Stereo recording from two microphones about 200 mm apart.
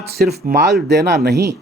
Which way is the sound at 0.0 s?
50° right (ahead or behind).